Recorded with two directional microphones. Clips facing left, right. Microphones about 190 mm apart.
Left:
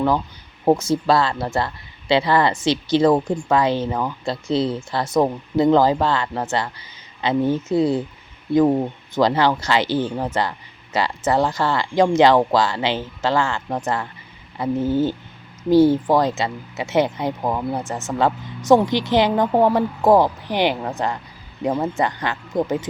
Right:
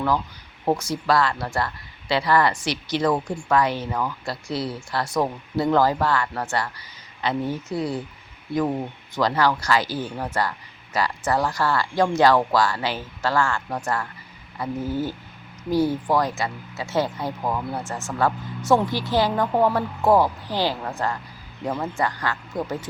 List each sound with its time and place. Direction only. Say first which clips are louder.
0.7 s speech: left 5 dB; 25° left (ahead or behind)